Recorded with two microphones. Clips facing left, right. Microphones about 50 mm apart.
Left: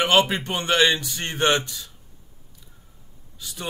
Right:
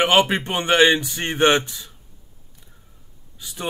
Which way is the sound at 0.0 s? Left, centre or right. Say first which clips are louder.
Right 2 dB; right.